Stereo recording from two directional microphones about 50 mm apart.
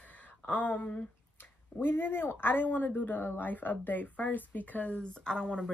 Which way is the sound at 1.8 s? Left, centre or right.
Left.